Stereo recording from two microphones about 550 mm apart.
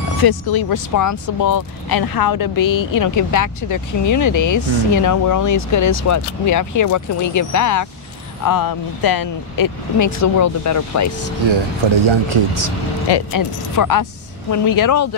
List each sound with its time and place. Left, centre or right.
0.2 s speech: left
11.4 s speech: right
13.1 s speech: left